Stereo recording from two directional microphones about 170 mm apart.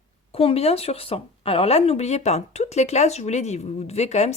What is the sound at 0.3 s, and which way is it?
A woman's voice, 35° left (ahead or behind).